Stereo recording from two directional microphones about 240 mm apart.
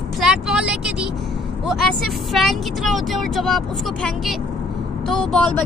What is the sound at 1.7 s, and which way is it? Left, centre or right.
Speech, centre.